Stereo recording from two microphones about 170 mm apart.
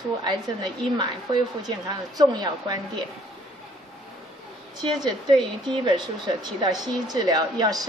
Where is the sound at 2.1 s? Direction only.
25° right (ahead or behind).